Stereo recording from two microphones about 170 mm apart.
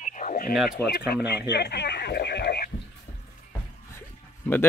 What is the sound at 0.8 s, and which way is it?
Speech, 15° left (ahead or behind).